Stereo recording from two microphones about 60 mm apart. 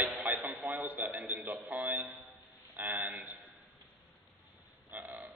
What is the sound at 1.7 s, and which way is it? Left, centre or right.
A man's voice, right.